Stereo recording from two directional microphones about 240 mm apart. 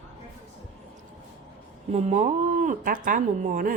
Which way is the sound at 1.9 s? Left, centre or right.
Right.